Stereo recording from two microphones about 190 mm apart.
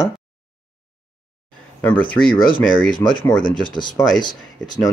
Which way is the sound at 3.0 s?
25° left (ahead or behind).